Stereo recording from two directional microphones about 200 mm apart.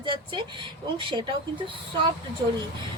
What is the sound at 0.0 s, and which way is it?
Speech, 25° right (ahead or behind).